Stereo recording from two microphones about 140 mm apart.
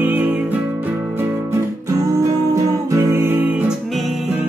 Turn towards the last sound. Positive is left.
turn(degrees=-15)  # may be behind; listen again after turning